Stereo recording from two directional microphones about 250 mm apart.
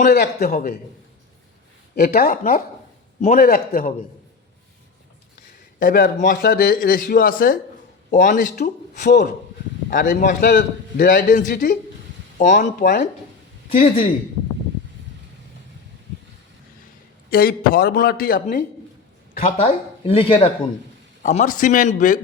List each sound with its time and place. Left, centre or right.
0.0 s a man's voice: left
2.0 s a man's voice: left
5.8 s a man's voice: left
17.2 s a man's voice: left